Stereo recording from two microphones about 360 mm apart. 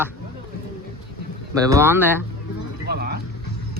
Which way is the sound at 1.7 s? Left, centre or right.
Centre.